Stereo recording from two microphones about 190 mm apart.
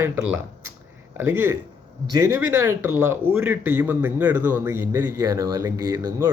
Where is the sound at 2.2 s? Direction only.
15° right (ahead or behind).